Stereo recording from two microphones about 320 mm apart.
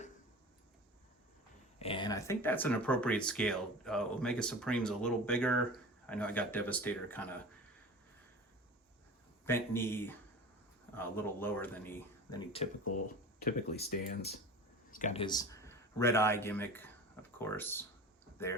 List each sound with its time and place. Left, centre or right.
1.8 s speech: centre
9.5 s speech: centre
13.4 s speech: left; by 17.8 s centre